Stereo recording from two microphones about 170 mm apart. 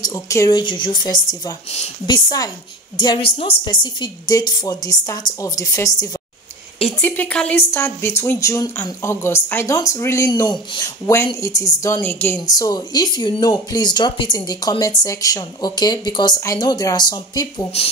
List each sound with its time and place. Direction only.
0.0 s speech: 20° left (ahead or behind)